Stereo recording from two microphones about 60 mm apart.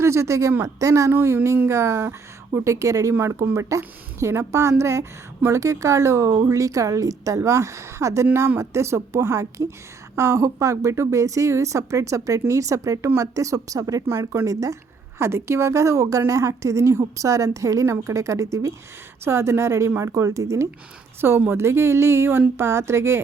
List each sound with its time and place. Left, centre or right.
0.0 s speech: right
1.6 s speech: right
2.6 s a woman's voice: right
3.2 s a woman's voice: right
15.2 s a woman's voice: right
19.2 s a woman's voice: right
21.2 s speech: right